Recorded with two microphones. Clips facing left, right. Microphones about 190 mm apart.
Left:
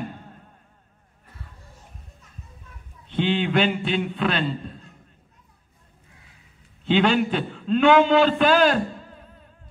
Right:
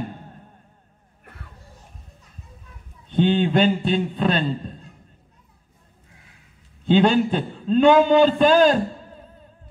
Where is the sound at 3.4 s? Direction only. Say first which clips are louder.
Right 3 dB; 35° right (ahead or behind).